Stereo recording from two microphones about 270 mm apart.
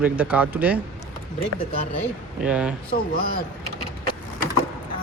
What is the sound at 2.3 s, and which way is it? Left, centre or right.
Speech, centre.